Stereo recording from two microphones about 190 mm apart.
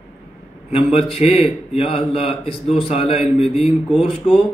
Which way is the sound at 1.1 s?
35° left (ahead or behind).